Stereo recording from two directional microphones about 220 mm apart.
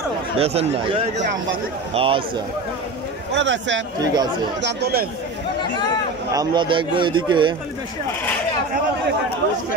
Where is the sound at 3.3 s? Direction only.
55° right (ahead or behind).